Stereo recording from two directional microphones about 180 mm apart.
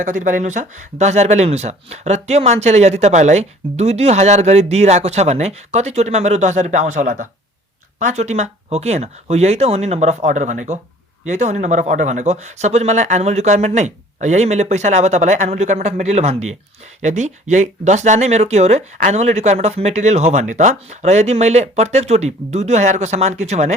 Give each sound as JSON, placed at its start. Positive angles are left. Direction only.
{"t": 0.0, "sound": "speech", "side_deg": -45}